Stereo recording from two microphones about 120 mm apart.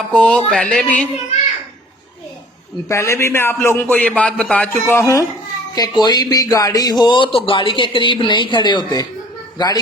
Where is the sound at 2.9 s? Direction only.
25° left (ahead or behind).